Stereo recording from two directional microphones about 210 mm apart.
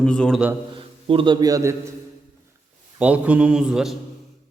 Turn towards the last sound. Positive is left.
turn(degrees=0)  # may be behind; listen again after turning